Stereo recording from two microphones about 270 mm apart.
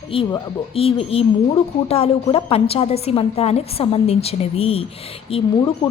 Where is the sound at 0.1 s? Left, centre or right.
Centre.